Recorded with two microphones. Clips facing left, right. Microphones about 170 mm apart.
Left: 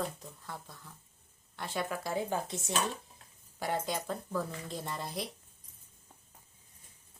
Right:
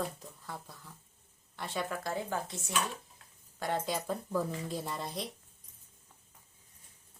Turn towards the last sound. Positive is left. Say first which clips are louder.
# even
turn(degrees=0)  # may be behind; listen again after turning